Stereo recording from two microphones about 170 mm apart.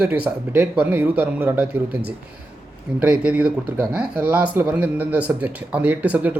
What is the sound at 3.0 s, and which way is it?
Speech, 5° right (ahead or behind).